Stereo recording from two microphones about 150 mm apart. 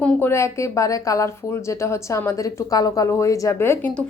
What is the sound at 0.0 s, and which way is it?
A woman's voice, 15° left (ahead or behind).